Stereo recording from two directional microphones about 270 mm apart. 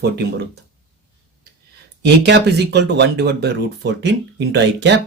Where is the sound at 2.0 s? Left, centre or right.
Right.